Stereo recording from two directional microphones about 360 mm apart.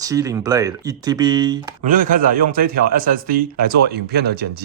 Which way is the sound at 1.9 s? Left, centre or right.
Right.